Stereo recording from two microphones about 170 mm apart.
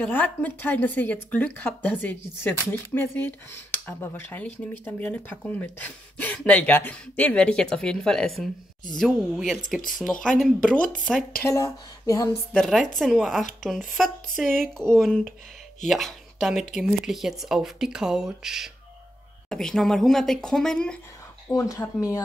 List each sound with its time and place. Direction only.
0.0 s a woman's voice: 10° left (ahead or behind)
11.4 s speech: 20° left (ahead or behind)
12.5 s speech: 5° left (ahead or behind)
21.5 s speech: 20° left (ahead or behind)